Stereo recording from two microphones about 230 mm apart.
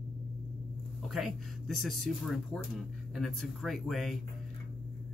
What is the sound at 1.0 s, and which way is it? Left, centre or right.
Speech, centre.